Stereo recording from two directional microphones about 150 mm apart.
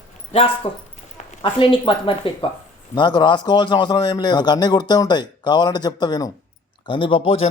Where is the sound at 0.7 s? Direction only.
35° left (ahead or behind).